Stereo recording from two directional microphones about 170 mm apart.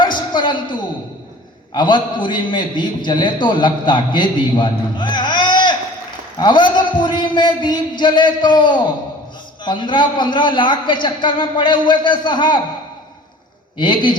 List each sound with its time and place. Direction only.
0.0 s a sound: 25° left (ahead or behind)
1.7 s a man's voice: 25° left (ahead or behind)
13.7 s a man's voice: 25° left (ahead or behind)